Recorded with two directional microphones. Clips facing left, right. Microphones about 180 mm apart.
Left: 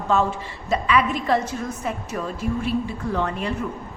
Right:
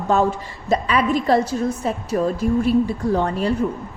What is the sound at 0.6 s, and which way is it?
A woman's voice, 40° right (ahead or behind).